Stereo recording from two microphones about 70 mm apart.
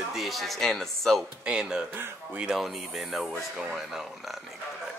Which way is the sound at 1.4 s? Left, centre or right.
Centre.